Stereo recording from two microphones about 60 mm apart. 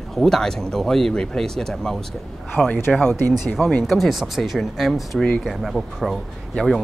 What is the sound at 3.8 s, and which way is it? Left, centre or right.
Speech, centre.